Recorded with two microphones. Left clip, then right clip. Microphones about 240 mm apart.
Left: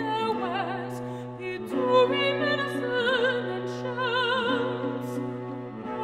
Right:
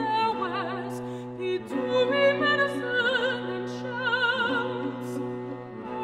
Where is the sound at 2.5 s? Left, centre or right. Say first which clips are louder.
Right 2 dB; left.